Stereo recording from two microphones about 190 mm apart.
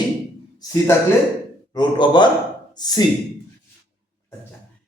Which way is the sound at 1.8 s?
25° left (ahead or behind).